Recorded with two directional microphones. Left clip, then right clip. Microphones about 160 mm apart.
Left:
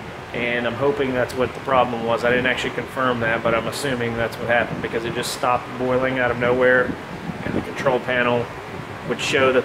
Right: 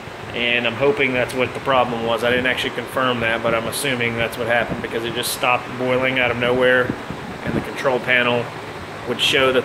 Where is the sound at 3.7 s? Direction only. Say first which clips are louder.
Right 2 dB; 20° left (ahead or behind).